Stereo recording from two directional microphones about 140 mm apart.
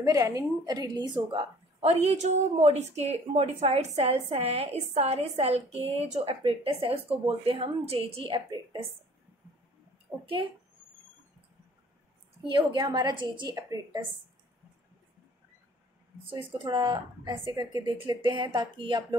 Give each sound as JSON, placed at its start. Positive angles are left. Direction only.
{"t": 0.0, "sound": "a woman's voice", "side_deg": -25}
{"t": 10.2, "sound": "a woman's voice", "side_deg": -35}
{"t": 12.4, "sound": "a woman's voice", "side_deg": -35}
{"t": 13.6, "sound": "a woman's voice", "side_deg": -25}
{"t": 16.5, "sound": "a woman's voice", "side_deg": -35}